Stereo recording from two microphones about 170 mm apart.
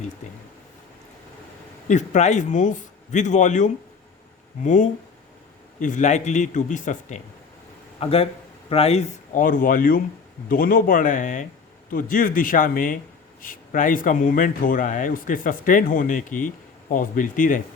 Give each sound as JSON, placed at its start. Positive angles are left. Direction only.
{"t": 1.9, "sound": "speech", "side_deg": 45}
{"t": 7.9, "sound": "speech", "side_deg": 35}